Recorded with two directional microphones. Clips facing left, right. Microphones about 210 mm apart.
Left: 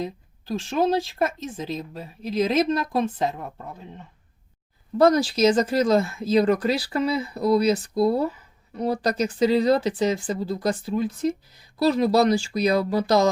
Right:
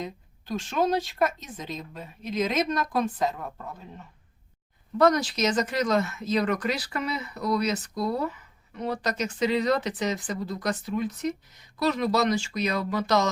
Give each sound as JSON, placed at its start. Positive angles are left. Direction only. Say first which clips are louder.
{"t": 0.0, "sound": "speech", "louder": "left 5 dB", "side_deg": 30}
{"t": 4.9, "sound": "speech", "louder": "left 4 dB", "side_deg": 30}